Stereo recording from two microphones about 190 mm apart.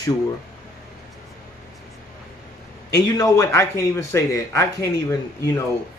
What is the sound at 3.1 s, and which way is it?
Speech, 15° left (ahead or behind).